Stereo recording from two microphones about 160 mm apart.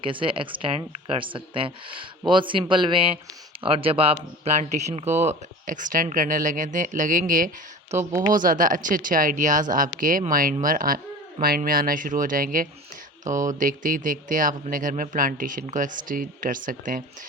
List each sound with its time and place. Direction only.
0.0 s speech: 30° right (ahead or behind); by 17.0 s 55° right (ahead or behind)